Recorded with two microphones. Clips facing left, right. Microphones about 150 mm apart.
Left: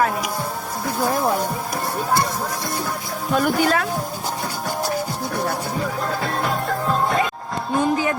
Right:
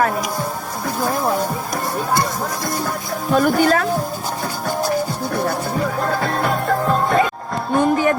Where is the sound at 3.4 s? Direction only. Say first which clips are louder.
Right 4 dB; 45° right (ahead or behind).